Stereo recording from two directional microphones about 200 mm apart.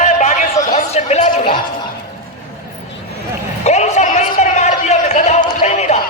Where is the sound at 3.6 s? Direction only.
35° left (ahead or behind).